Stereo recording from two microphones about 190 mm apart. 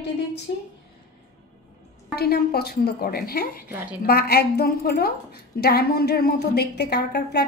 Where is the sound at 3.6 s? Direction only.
10° right (ahead or behind).